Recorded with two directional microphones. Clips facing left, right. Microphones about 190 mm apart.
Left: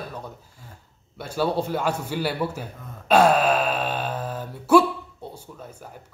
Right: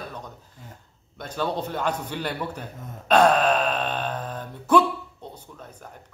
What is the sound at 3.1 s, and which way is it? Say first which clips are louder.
Wail: left 1 dB; 10° left (ahead or behind).